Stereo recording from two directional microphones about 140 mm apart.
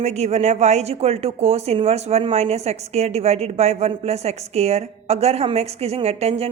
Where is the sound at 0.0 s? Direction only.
50° right (ahead or behind).